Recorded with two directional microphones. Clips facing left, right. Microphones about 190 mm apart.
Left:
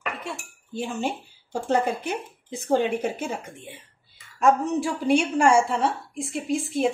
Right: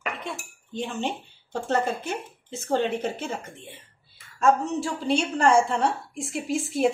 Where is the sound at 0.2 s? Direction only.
5° left (ahead or behind).